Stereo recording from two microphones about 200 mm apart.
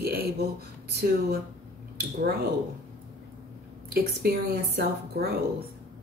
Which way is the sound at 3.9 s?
50° right (ahead or behind).